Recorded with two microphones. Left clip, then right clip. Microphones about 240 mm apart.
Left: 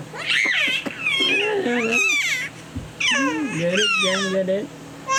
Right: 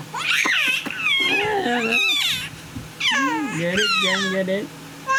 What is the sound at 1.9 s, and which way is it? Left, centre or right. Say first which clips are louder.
Speech: left 1 dB; right.